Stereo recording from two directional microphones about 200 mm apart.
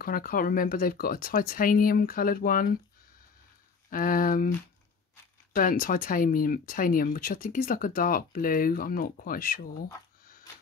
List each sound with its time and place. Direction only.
0.0 s speech: 50° left (ahead or behind)
3.9 s speech: 45° left (ahead or behind)
5.5 s speech: 45° left (ahead or behind)